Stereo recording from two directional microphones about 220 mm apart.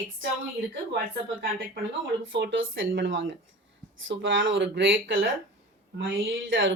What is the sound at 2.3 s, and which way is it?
Speech, 55° right (ahead or behind).